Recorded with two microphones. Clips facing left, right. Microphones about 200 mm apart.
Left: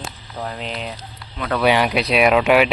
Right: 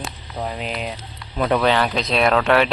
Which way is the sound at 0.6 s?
5° right (ahead or behind).